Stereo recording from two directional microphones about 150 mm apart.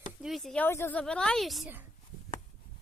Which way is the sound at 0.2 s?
Centre (ahead or behind).